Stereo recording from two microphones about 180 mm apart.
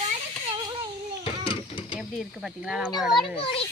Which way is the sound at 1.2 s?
30° left (ahead or behind).